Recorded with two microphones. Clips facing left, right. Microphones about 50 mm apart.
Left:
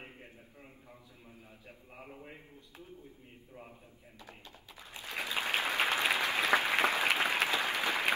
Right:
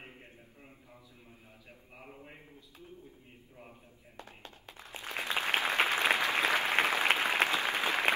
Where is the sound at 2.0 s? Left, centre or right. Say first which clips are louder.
Left 1 dB; centre.